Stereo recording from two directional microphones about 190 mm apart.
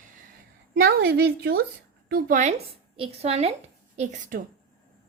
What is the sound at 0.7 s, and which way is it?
A woman's voice, 55° right (ahead or behind).